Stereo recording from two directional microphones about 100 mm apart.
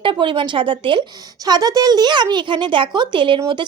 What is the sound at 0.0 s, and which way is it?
Speech, 55° right (ahead or behind).